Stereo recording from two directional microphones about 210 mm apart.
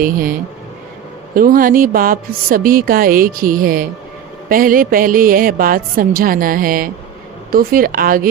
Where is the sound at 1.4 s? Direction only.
40° right (ahead or behind).